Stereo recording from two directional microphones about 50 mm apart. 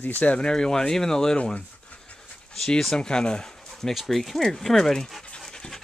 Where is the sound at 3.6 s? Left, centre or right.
Centre.